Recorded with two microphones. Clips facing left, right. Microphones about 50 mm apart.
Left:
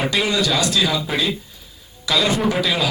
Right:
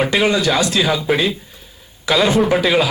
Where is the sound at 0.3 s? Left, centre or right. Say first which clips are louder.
Right 3 dB; right.